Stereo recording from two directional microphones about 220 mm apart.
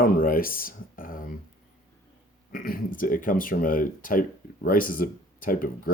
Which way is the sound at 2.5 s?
40° left (ahead or behind).